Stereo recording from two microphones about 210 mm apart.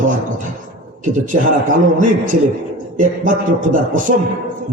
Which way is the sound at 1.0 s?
40° right (ahead or behind).